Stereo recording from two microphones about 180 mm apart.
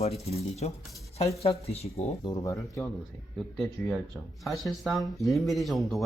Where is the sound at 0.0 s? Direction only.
35° left (ahead or behind).